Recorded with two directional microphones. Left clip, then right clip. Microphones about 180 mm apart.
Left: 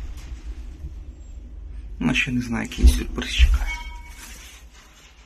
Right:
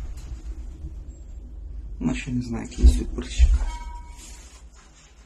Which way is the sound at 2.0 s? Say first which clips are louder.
Left 7 dB; centre (ahead or behind).